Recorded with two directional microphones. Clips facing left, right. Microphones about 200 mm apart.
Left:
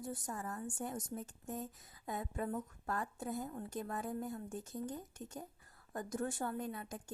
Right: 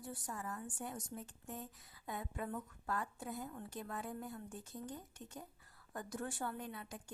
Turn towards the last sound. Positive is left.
turn(degrees=45)  # may be behind; listen again after turning